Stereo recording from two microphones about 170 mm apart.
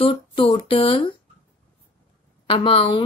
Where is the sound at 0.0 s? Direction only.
30° left (ahead or behind).